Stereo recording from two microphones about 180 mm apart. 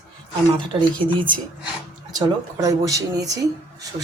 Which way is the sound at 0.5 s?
25° right (ahead or behind).